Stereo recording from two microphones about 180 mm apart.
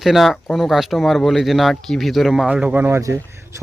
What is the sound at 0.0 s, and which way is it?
Speech, centre (ahead or behind).